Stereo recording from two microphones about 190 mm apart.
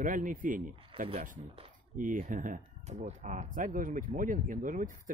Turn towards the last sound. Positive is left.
turn(degrees=-45)  # may be behind; listen again after turning